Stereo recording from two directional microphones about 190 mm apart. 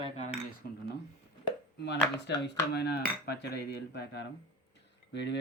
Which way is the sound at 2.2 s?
60° left (ahead or behind).